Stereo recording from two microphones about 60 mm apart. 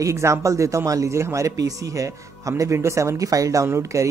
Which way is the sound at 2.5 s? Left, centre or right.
Right.